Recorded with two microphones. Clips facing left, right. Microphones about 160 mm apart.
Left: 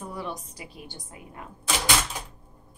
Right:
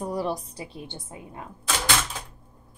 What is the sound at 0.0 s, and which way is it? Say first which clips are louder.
A woman's voice: right 7 dB; 35° right (ahead or behind).